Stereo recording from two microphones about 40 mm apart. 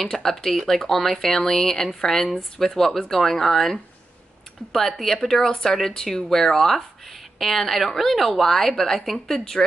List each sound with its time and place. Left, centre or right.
0.0 s speech: centre
5.0 s speech: centre
5.5 s speech: centre